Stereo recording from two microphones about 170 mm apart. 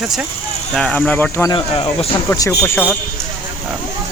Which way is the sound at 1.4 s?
30° left (ahead or behind).